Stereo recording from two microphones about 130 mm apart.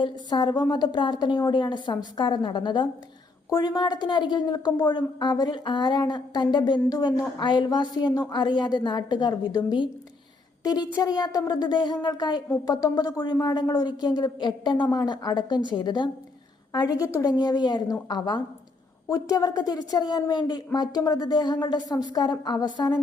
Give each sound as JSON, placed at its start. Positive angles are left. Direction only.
{"t": 0.0, "sound": "a woman's voice", "side_deg": 35}